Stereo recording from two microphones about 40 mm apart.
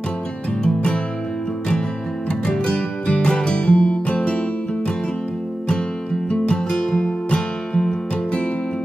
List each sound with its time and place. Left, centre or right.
0.6 s music: left
2.4 s music: left
6.3 s music: left